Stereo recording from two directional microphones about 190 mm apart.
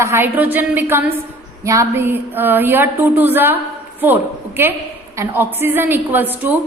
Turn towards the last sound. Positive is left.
turn(degrees=-10)  # may be behind; listen again after turning